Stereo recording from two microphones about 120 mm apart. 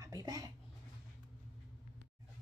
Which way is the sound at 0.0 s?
30° right (ahead or behind).